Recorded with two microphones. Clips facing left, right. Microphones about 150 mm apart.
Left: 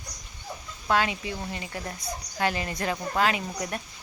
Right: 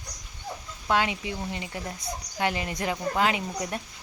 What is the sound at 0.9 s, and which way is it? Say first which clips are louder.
Speech: even; 20° right (ahead or behind).